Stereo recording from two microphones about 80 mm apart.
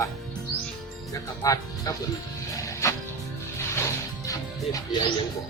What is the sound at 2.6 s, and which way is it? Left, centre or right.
Music, left.